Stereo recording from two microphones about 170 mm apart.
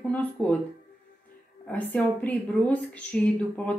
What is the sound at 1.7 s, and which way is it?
A woman's voice, 10° left (ahead or behind).